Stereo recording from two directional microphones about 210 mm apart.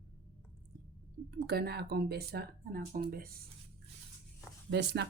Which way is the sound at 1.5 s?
50° right (ahead or behind).